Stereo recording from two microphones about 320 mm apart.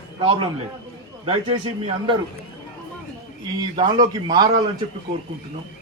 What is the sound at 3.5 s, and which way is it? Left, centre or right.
Speech, centre.